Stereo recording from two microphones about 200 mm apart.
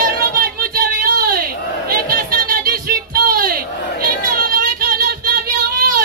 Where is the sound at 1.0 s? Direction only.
50° right (ahead or behind).